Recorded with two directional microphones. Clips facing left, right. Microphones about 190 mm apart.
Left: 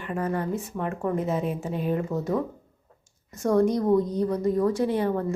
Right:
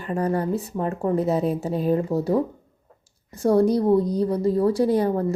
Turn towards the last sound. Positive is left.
turn(degrees=-40)  # may be behind; listen again after turning